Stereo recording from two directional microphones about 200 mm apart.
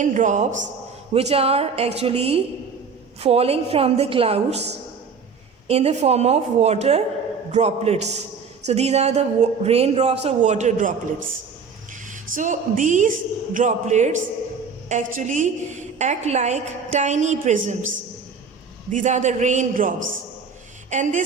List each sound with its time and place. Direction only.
0.0 s a woman's voice: 40° right (ahead or behind)
5.6 s a woman's voice: 30° right (ahead or behind)
12.3 s a woman's voice: 40° right (ahead or behind)
18.9 s a woman's voice: 40° right (ahead or behind)
20.9 s a woman's voice: 40° right (ahead or behind)